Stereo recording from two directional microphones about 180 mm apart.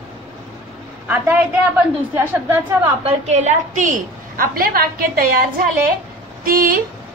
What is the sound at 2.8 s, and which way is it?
A woman's voice, 35° right (ahead or behind).